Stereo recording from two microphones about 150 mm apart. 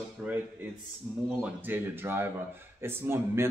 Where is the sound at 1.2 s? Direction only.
10° right (ahead or behind).